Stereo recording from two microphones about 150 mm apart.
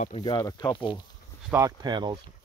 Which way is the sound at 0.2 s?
25° left (ahead or behind).